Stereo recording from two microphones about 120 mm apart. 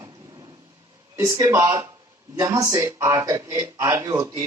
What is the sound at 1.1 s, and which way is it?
Speech, 25° right (ahead or behind).